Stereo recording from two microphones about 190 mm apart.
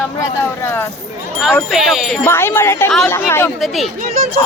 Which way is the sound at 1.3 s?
Centre (ahead or behind).